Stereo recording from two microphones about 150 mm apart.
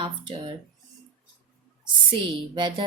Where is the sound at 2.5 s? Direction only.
30° right (ahead or behind).